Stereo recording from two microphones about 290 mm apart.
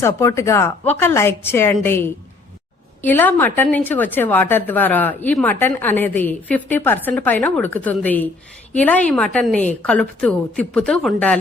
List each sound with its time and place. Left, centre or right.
0.0 s a woman's voice: centre